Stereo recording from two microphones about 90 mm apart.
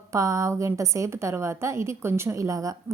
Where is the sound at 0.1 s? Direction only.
35° right (ahead or behind).